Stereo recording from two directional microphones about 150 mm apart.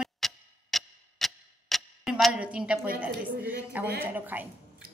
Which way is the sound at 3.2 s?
10° right (ahead or behind).